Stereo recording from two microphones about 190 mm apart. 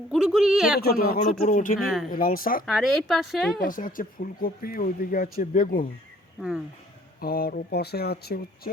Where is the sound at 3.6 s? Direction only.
45° left (ahead or behind).